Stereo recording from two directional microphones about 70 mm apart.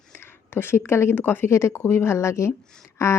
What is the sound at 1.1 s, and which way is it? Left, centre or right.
Speech, left.